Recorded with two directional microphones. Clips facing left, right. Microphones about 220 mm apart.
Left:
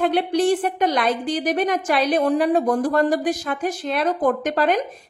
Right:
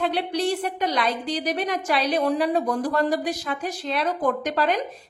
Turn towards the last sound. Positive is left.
turn(degrees=50)  # may be behind; listen again after turning